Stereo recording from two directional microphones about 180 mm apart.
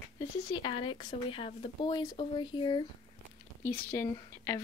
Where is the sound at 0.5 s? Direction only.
30° left (ahead or behind).